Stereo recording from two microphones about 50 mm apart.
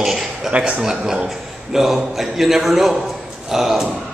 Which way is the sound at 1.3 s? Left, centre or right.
Centre.